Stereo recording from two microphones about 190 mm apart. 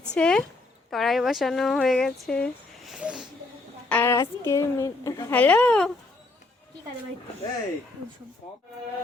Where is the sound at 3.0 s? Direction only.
5° right (ahead or behind).